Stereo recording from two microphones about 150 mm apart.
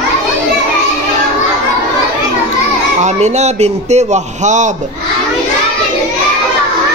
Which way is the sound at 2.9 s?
50° right (ahead or behind).